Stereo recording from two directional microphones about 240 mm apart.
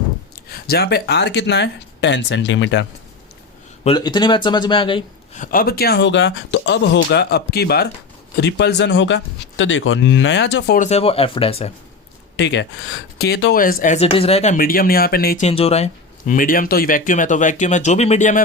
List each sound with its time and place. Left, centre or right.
0.5 s speech: left
3.8 s speech: centre
5.4 s speech: left
10.8 s speech: left
12.4 s speech: left
15.4 s speech: left